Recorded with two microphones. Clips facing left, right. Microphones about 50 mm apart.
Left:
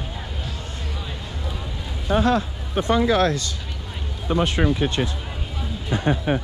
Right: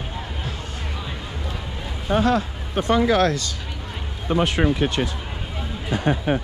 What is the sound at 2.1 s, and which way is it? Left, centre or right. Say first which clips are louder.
Speech: even; right.